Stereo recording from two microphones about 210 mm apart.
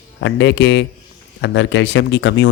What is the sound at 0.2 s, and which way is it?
Speech, 60° left (ahead or behind).